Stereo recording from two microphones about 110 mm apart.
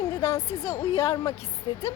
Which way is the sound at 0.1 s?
30° left (ahead or behind).